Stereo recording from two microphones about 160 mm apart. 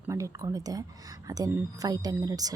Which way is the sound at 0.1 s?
20° right (ahead or behind).